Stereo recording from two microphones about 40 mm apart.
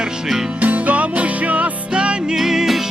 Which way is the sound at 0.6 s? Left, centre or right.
Right.